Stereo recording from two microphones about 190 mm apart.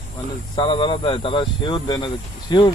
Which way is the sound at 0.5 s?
25° left (ahead or behind).